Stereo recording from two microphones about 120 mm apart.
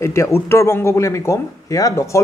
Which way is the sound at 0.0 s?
25° left (ahead or behind).